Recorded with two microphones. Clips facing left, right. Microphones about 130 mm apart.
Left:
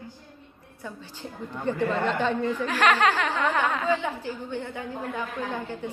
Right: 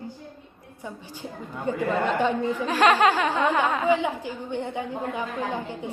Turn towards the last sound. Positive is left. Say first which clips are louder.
# right 2 dB
turn(degrees=-15)  # may be behind; listen again after turning